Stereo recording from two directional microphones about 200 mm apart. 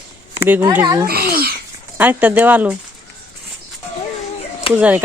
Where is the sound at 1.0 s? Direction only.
50° right (ahead or behind).